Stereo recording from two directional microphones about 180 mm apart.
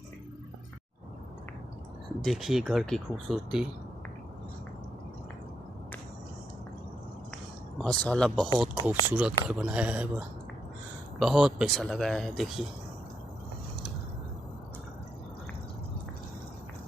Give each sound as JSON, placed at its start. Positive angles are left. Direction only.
{"t": 2.2, "sound": "speech", "side_deg": 0}
{"t": 7.8, "sound": "speech", "side_deg": 5}
{"t": 8.8, "sound": "speech", "side_deg": -5}